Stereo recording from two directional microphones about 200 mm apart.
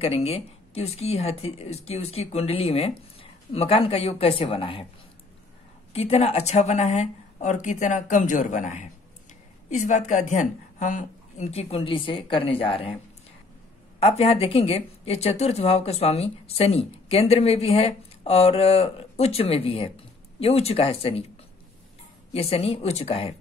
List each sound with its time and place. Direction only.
0.0 s speech: 30° left (ahead or behind)
5.9 s speech: 30° left (ahead or behind)
13.9 s speech: 30° left (ahead or behind)
22.3 s speech: 30° left (ahead or behind)